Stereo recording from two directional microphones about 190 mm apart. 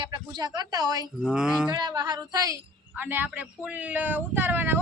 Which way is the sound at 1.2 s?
5° right (ahead or behind).